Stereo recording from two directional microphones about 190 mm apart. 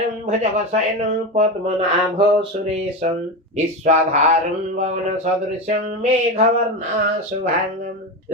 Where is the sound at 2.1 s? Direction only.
30° right (ahead or behind).